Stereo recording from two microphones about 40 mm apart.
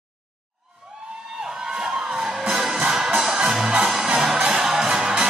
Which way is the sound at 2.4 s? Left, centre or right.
Centre.